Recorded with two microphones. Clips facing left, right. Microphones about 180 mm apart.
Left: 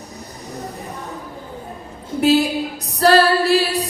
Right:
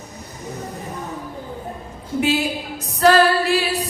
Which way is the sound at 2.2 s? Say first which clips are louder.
Left 7 dB; 35° left (ahead or behind).